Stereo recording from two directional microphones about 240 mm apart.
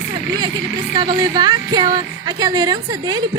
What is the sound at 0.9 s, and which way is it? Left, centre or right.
A woman's voice, centre.